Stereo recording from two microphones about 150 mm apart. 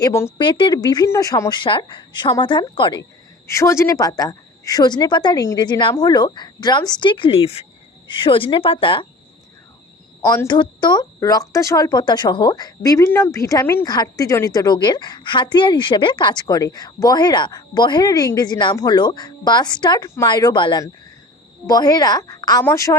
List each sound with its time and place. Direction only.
0.0 s speech: 15° left (ahead or behind)
0.3 s a woman's voice: 30° left (ahead or behind)
3.5 s a woman's voice: 20° left (ahead or behind); by 9.0 s 35° left (ahead or behind)
10.2 s a woman's voice: 25° left (ahead or behind)